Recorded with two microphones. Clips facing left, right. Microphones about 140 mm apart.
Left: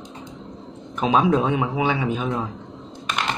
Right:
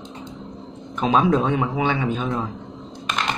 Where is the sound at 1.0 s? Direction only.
5° left (ahead or behind).